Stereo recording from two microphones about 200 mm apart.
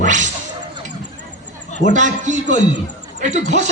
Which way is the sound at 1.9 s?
40° right (ahead or behind).